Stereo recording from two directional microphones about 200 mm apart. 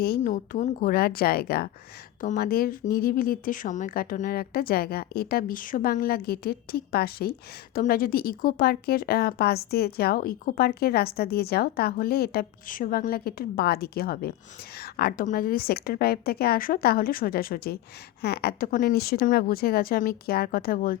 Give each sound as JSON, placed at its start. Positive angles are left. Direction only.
{"t": 0.0, "sound": "a woman's voice", "side_deg": 45}